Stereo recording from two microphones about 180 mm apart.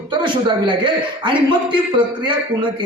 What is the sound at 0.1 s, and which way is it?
Speech, 25° right (ahead or behind).